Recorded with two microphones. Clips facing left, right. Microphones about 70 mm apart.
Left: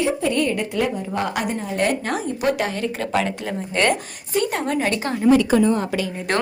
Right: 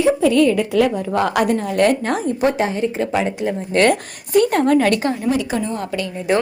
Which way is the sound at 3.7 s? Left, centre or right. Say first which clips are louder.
Right 4 dB; right.